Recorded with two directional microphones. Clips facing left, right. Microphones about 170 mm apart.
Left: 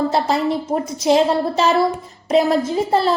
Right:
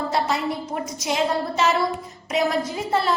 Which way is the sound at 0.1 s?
30° left (ahead or behind).